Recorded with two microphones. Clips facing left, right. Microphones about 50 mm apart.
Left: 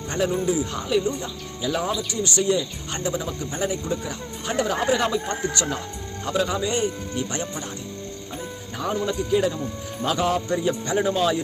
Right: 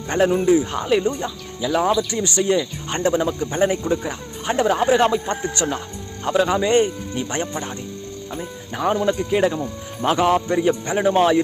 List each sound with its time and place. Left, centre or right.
0.1 s speech: right
1.0 s speech: right
3.3 s speech: right
8.7 s speech: right
10.0 s speech: right
10.8 s speech: right
11.1 s speech: right